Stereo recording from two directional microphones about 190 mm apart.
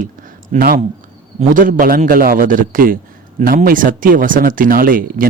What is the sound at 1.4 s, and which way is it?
A man's voice, 45° right (ahead or behind).